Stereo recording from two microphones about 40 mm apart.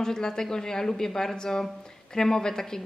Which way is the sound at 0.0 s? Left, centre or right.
Centre.